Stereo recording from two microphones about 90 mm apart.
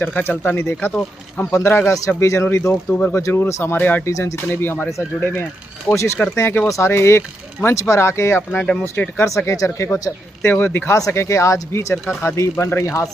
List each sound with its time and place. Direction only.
0.0 s speech: 20° left (ahead or behind)
2.9 s speech: 20° left (ahead or behind)
4.1 s speech: 35° left (ahead or behind)
4.4 s speech: 25° left (ahead or behind)
10.9 s speech: 35° left (ahead or behind)